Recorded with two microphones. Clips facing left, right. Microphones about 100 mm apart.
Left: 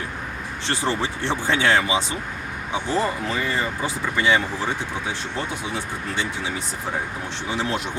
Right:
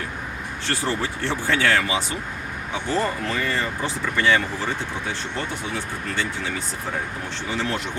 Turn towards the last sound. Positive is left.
turn(degrees=15)  # may be behind; listen again after turning